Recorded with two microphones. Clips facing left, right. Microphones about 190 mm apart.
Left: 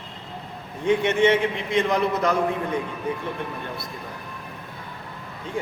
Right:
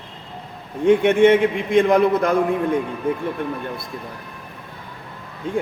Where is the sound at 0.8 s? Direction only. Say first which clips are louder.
Right 6 dB; 55° right (ahead or behind).